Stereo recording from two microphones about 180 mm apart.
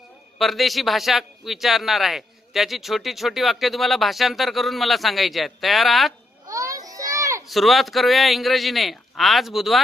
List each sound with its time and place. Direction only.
0.3 s a man's voice: centre (ahead or behind)
6.5 s children playing: 20° right (ahead or behind)
7.4 s a man's voice: centre (ahead or behind)